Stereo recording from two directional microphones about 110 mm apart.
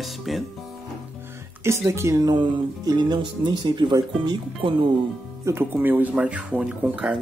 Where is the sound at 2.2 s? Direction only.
40° right (ahead or behind).